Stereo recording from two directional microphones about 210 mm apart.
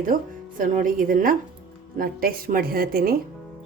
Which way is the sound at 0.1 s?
40° right (ahead or behind).